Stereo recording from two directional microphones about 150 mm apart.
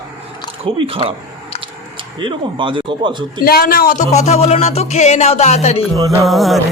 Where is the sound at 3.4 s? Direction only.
90° left.